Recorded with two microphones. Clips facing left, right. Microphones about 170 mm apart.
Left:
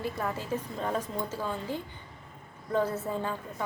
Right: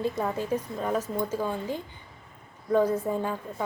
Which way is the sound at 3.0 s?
15° right (ahead or behind).